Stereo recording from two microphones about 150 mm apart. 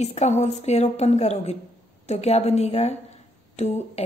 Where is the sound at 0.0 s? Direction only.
45° left (ahead or behind).